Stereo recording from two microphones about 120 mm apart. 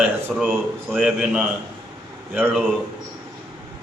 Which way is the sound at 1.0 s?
5° right (ahead or behind).